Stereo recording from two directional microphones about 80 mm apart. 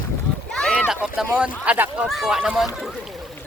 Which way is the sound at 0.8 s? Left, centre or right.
Centre.